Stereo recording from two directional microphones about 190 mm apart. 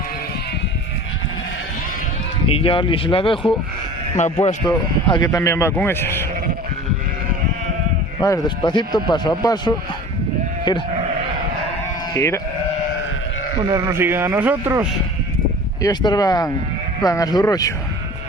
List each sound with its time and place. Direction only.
2.5 s a man's voice: 30° left (ahead or behind)
4.6 s speech: 25° left (ahead or behind)
8.2 s a man's voice: 20° left (ahead or behind)
12.1 s speech: 15° left (ahead or behind)
13.7 s a man's voice: 15° right (ahead or behind)
15.8 s a man's voice: 20° left (ahead or behind)